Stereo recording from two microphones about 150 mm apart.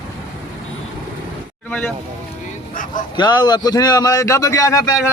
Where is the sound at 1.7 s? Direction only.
5° left (ahead or behind).